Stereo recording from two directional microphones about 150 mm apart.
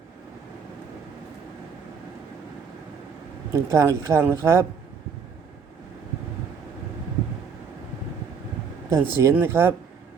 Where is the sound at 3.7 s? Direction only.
20° right (ahead or behind).